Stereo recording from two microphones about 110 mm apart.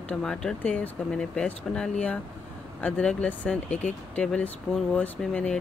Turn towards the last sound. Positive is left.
turn(degrees=10)  # may be behind; listen again after turning